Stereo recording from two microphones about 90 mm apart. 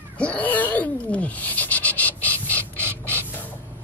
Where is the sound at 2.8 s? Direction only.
20° left (ahead or behind).